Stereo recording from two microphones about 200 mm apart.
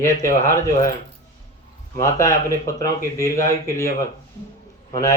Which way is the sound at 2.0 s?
15° left (ahead or behind).